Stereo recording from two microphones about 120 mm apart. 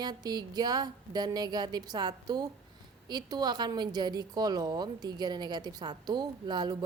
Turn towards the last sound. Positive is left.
turn(degrees=-35)  # may be behind; listen again after turning